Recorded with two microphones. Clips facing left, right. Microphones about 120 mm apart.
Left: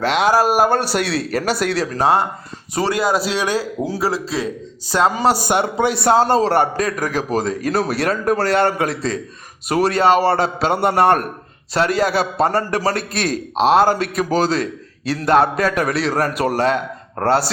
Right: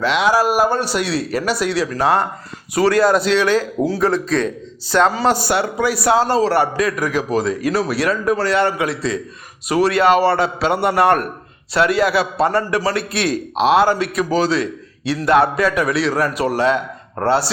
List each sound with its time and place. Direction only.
0.0 s a man's voice: 45° left (ahead or behind)
2.0 s speech: 20° left (ahead or behind)
3.0 s speech: 5° left (ahead or behind); by 6.1 s 25° left (ahead or behind)
6.1 s a man's voice: 45° left (ahead or behind)
9.9 s a man's voice: 35° left (ahead or behind)